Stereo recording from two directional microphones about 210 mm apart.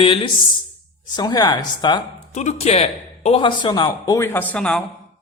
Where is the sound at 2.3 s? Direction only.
30° left (ahead or behind); by 4.8 s 5° left (ahead or behind).